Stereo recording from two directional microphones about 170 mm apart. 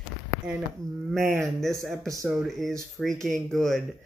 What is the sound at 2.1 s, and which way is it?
Speech, 20° right (ahead or behind).